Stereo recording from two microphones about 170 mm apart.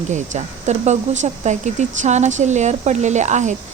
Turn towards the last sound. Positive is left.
turn(degrees=-45)  # may be behind; listen again after turning